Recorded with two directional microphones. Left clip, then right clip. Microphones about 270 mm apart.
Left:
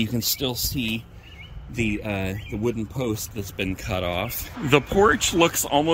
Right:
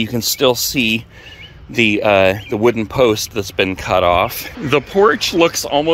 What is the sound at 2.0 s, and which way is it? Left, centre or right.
Speech, right.